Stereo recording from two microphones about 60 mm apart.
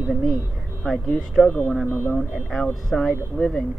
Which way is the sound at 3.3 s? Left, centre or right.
Left.